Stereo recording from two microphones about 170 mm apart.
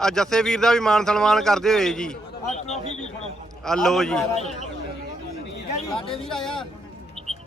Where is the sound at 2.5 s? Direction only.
40° left (ahead or behind).